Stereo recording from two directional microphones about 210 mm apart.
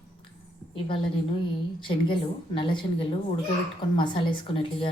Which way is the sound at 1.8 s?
25° left (ahead or behind).